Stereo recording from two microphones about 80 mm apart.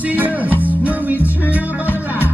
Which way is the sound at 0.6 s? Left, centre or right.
Centre.